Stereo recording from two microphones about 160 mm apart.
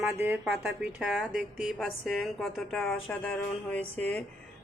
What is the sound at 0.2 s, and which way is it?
A woman's voice, 15° right (ahead or behind).